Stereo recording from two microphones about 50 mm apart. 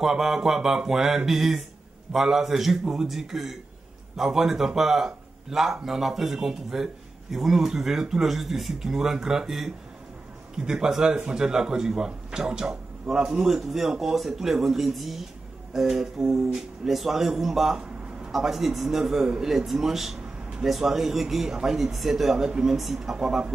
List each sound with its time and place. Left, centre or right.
0.0 s speech: centre
23.1 s speech: centre